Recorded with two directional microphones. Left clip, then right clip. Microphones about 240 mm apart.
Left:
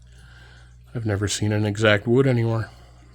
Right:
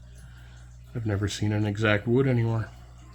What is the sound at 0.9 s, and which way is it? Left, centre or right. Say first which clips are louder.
Speech: left 5 dB; left.